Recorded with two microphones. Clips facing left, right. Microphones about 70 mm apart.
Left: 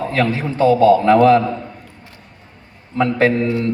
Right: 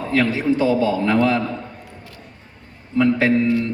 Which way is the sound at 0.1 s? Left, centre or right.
Left.